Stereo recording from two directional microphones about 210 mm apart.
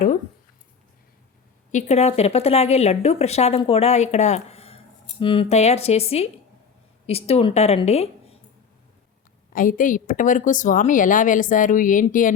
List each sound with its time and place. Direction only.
1.7 s speech: 30° left (ahead or behind)
9.5 s a woman's voice: 40° left (ahead or behind)